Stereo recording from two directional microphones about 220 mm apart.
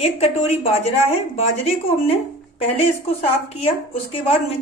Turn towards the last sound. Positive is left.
turn(degrees=25)  # may be behind; listen again after turning